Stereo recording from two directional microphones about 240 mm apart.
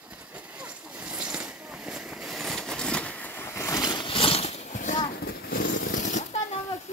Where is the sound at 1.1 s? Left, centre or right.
Centre; by 6.2 s left.